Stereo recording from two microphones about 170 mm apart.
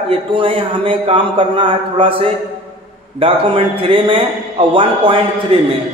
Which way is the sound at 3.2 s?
30° right (ahead or behind).